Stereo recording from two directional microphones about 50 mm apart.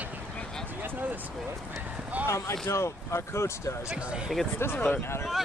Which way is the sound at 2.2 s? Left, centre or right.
Left.